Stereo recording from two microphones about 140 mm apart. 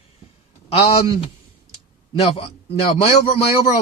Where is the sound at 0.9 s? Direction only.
40° left (ahead or behind).